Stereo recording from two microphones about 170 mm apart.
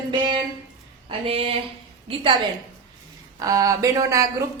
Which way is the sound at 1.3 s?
35° right (ahead or behind).